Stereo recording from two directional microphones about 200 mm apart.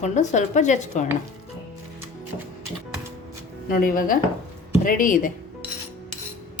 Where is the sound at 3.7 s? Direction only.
45° left (ahead or behind).